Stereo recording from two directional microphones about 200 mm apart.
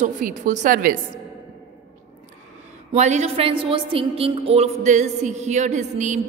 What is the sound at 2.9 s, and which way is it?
A woman's voice, 35° right (ahead or behind).